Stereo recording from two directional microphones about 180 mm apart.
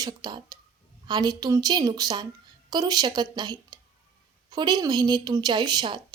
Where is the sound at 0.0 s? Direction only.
25° right (ahead or behind).